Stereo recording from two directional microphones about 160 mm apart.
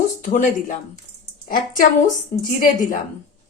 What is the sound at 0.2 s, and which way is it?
Speech, 50° left (ahead or behind).